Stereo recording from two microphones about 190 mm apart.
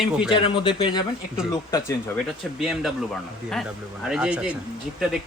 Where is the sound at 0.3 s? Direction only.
25° left (ahead or behind).